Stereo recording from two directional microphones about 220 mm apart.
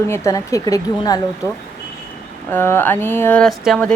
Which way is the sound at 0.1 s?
15° left (ahead or behind).